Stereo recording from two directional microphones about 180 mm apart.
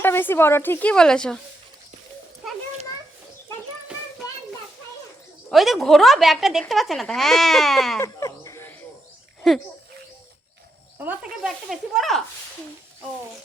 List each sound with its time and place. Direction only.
0.0 s speech: 10° left (ahead or behind)
5.5 s a woman's voice: centre (ahead or behind)
7.9 s a sound: 15° left (ahead or behind)
10.9 s a woman's voice: 10° right (ahead or behind)